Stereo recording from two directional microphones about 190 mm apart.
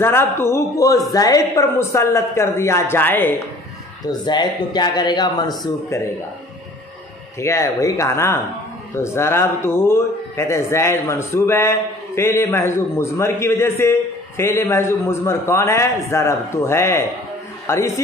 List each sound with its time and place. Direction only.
0.0 s speech: 10° left (ahead or behind)
4.1 s speech: 20° left (ahead or behind)
7.3 s speech: 15° left (ahead or behind)